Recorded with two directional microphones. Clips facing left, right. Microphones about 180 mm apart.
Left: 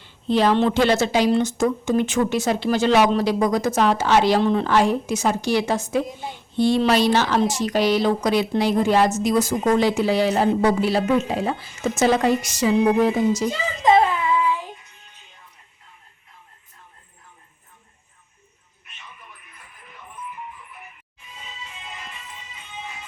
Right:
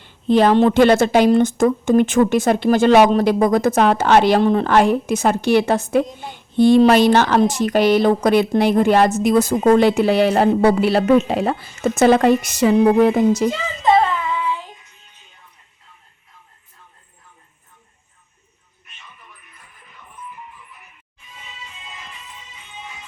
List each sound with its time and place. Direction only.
0.0 s speech: 50° right (ahead or behind)